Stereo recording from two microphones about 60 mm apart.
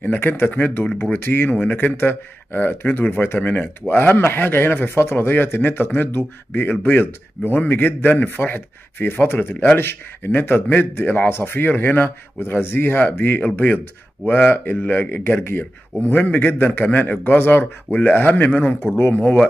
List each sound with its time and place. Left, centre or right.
0.0 s speech: left